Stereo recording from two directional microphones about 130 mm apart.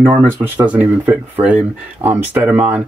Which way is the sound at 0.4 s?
15° right (ahead or behind).